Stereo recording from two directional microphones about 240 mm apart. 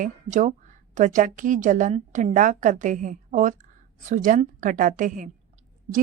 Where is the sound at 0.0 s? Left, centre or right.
Right.